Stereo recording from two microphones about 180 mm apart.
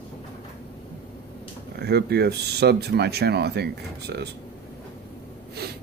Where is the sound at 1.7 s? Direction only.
65° right (ahead or behind).